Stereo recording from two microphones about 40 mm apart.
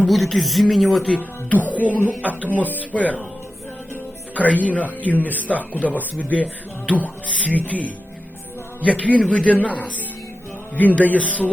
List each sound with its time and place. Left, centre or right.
0.1 s speech: centre
1.1 s speech: left
4.4 s speech: left